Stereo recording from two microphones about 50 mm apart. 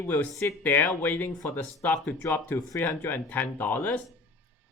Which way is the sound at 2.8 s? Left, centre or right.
Left.